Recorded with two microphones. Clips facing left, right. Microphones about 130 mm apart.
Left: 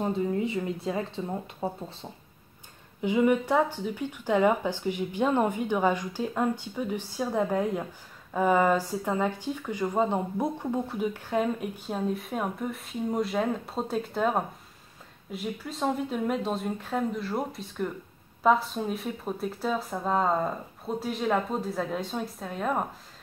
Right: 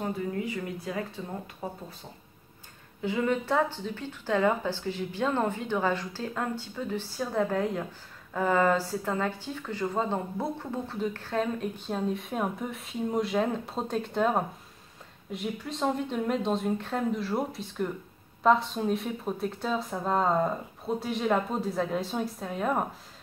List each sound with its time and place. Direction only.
0.0 s speech: 20° left (ahead or behind)
3.0 s speech: 15° left (ahead or behind); by 22.8 s centre (ahead or behind)